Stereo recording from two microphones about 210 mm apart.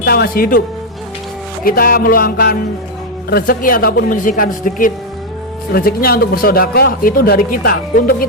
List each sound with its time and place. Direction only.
0.0 s a man's voice: 50° left (ahead or behind)
1.6 s a man's voice: 45° left (ahead or behind)